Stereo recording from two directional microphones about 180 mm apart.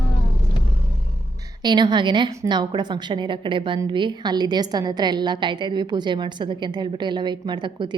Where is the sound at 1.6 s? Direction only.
25° right (ahead or behind).